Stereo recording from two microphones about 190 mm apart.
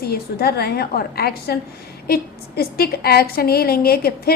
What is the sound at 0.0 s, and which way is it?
A woman's voice, 55° left (ahead or behind).